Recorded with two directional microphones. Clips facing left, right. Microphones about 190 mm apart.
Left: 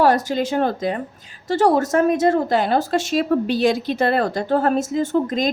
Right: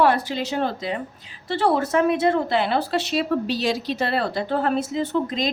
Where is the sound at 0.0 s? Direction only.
40° left (ahead or behind).